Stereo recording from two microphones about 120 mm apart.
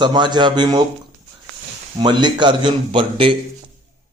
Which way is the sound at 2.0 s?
40° right (ahead or behind).